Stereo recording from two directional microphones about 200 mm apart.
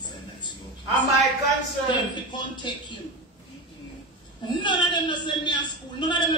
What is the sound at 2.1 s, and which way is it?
Speech, 25° left (ahead or behind).